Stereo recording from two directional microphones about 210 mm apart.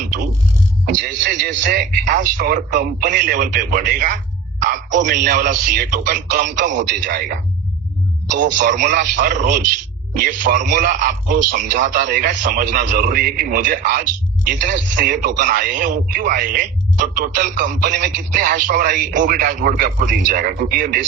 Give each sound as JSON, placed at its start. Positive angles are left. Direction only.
{"t": 0.9, "sound": "speech", "side_deg": -40}
{"t": 8.5, "sound": "speech", "side_deg": -40}
{"t": 14.6, "sound": "speech", "side_deg": -55}
{"t": 15.0, "sound": "speech", "side_deg": -40}